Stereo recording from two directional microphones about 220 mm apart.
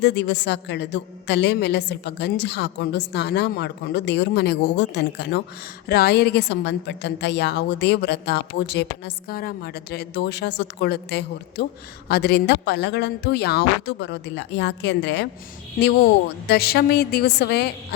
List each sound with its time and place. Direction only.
0.0 s a woman's voice: 50° left (ahead or behind)
16.5 s a woman's voice: 45° left (ahead or behind)